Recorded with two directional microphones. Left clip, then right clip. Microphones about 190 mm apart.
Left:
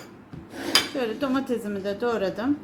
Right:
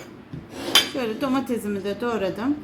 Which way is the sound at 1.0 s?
20° right (ahead or behind).